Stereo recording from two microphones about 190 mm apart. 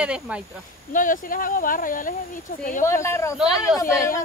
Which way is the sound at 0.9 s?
45° left (ahead or behind).